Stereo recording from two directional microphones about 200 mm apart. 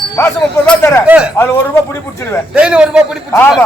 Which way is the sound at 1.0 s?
5° right (ahead or behind).